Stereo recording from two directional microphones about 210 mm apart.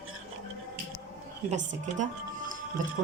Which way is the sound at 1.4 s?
35° right (ahead or behind).